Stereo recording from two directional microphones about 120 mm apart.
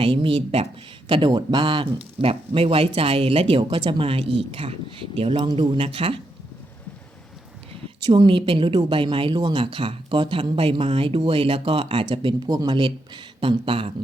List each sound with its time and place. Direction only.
0.0 s speech: 45° right (ahead or behind)
8.0 s speech: 40° right (ahead or behind)